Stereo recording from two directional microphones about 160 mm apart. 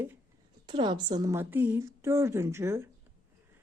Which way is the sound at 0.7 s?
30° right (ahead or behind).